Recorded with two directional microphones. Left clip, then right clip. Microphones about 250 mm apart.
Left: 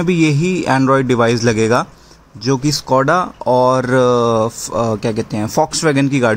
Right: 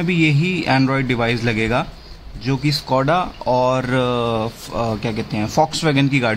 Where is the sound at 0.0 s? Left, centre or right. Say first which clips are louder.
Left 3 dB; centre.